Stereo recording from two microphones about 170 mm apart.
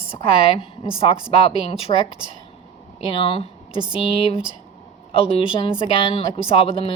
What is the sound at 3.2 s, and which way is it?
Speech, 35° left (ahead or behind).